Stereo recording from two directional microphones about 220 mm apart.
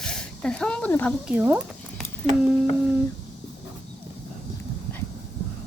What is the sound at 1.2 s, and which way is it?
Speech, 5° right (ahead or behind).